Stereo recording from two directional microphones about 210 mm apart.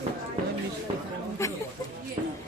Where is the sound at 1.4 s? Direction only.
15° left (ahead or behind).